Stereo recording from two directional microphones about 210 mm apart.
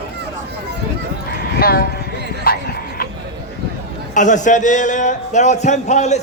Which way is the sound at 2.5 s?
45° left (ahead or behind).